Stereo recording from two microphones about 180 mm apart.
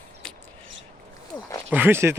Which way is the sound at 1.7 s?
10° right (ahead or behind).